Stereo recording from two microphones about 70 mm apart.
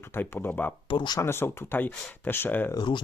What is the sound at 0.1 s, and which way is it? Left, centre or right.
Speech, left.